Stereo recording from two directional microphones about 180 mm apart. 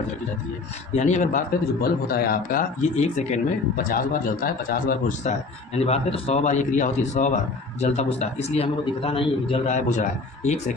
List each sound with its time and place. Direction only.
0.9 s speech: 40° left (ahead or behind)
5.7 s a man's voice: 35° left (ahead or behind)
9.6 s speech: 45° left (ahead or behind)